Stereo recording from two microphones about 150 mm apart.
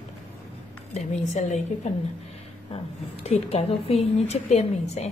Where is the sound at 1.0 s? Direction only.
50° left (ahead or behind).